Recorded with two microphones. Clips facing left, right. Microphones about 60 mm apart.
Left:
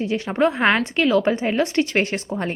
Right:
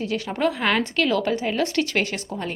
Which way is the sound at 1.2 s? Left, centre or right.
Left.